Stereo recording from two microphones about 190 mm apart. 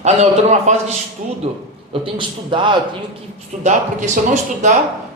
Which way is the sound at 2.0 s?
25° right (ahead or behind).